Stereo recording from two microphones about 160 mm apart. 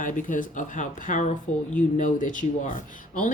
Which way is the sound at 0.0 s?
55° left (ahead or behind).